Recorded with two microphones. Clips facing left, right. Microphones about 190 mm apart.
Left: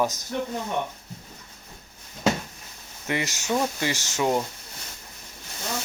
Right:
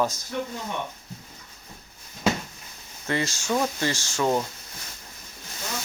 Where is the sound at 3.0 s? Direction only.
15° left (ahead or behind).